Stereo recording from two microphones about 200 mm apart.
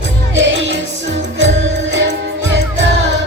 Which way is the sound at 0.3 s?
70° right (ahead or behind).